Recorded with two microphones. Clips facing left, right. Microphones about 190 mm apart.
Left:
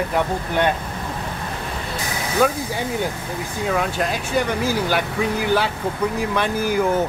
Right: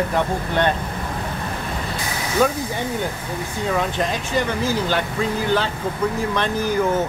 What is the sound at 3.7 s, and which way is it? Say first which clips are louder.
Speech: even; 5° left (ahead or behind).